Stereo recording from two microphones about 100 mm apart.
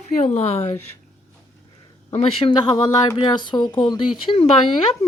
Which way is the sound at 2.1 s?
90° left.